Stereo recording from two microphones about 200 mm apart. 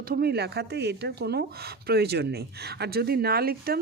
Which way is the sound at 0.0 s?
50° right (ahead or behind).